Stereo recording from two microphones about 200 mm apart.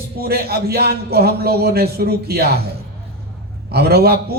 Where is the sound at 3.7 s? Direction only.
50° right (ahead or behind).